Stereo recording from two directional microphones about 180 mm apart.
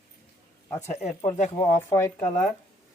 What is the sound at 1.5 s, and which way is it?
Speech, 20° left (ahead or behind).